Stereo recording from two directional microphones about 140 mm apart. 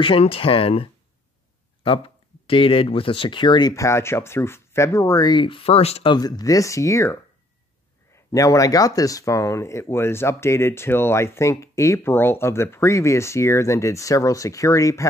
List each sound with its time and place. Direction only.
0.0 s speech: 40° left (ahead or behind)
6.1 s speech: 30° left (ahead or behind)
8.3 s speech: 25° left (ahead or behind)